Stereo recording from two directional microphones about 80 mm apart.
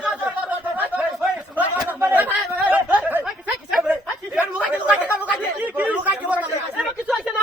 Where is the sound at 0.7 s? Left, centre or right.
Centre.